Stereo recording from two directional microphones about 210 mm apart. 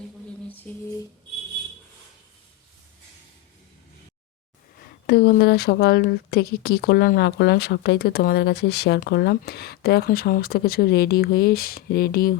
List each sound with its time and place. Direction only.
0.7 s speech: 5° left (ahead or behind)
5.0 s speech: 50° left (ahead or behind)